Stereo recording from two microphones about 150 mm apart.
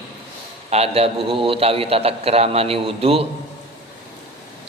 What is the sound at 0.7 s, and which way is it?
A man's voice, 45° right (ahead or behind).